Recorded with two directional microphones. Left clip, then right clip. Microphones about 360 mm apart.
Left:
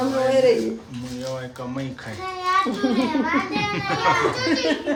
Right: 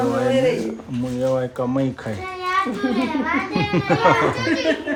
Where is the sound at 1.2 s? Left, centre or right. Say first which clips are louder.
Right 10 dB; centre.